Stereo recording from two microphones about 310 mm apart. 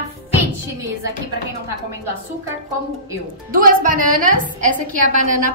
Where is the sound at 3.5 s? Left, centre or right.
Right.